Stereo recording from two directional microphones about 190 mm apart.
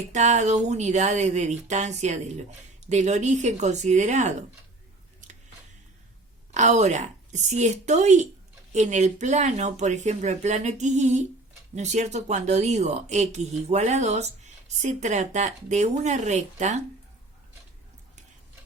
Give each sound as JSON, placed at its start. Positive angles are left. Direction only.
{"t": 0.1, "sound": "speech", "side_deg": -35}
{"t": 6.5, "sound": "speech", "side_deg": -40}